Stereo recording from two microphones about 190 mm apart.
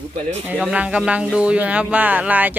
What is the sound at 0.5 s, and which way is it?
Speech, centre (ahead or behind).